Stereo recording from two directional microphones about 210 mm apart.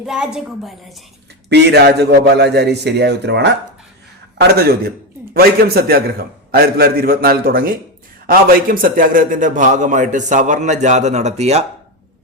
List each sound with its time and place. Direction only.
0.0 s a woman's voice: 5° right (ahead or behind)
1.5 s a man's voice: 55° right (ahead or behind); by 11.6 s 30° right (ahead or behind)